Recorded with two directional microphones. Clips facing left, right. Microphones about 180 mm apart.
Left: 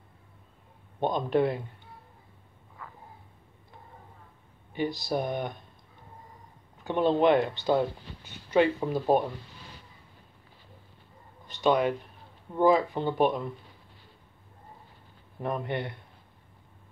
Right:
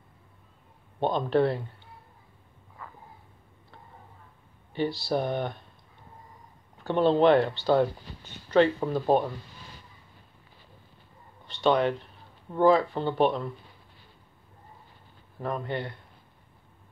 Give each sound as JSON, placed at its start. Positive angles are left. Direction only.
{"t": 1.0, "sound": "speech", "side_deg": 15}
{"t": 4.7, "sound": "speech", "side_deg": 15}
{"t": 6.8, "sound": "speech", "side_deg": 15}
{"t": 11.6, "sound": "speech", "side_deg": 10}
{"t": 15.4, "sound": "speech", "side_deg": 20}